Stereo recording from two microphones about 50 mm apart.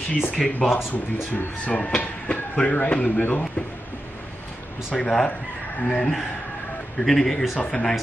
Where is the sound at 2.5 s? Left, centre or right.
Left.